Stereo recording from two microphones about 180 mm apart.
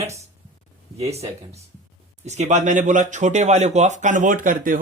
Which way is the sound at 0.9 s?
35° right (ahead or behind).